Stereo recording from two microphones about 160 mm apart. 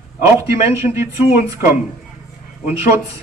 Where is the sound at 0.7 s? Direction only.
15° right (ahead or behind).